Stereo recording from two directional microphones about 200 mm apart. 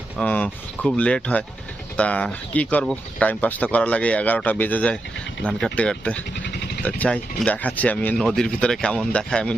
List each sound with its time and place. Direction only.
0.2 s speech: 5° left (ahead or behind)